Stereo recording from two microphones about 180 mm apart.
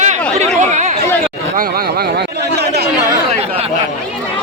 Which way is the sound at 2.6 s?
65° right (ahead or behind).